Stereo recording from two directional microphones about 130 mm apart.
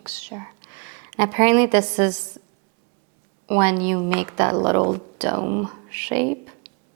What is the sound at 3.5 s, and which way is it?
A woman's voice, 20° right (ahead or behind).